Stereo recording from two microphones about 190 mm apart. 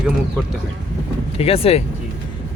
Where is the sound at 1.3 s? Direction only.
30° left (ahead or behind).